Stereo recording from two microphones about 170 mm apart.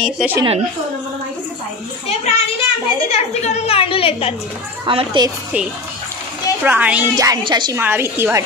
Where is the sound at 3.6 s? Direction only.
35° left (ahead or behind).